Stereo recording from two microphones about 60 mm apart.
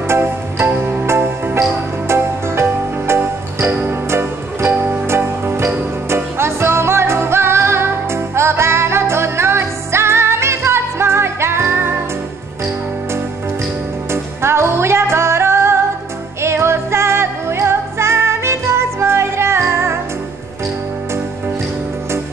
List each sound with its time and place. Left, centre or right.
0.1 s music: right
14.1 s music: right